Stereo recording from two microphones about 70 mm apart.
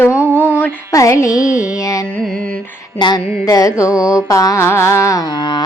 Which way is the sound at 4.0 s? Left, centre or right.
Left.